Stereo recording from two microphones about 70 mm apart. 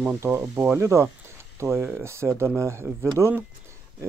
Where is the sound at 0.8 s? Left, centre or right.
Right.